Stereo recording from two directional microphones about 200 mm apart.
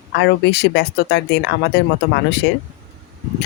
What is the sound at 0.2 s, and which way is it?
Speech, 60° left (ahead or behind).